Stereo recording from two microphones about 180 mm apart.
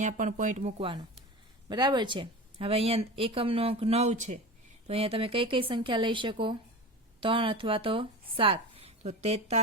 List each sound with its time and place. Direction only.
0.0 s speech: 45° right (ahead or behind)
1.6 s speech: 25° right (ahead or behind)